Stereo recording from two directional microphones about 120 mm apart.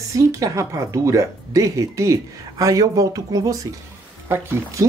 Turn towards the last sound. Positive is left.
turn(degrees=-20)  # may be behind; listen again after turning